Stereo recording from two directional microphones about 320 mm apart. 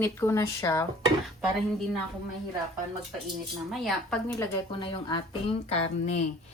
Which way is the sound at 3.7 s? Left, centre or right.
Centre.